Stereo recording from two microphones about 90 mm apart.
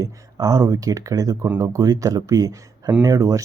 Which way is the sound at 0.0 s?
40° right (ahead or behind).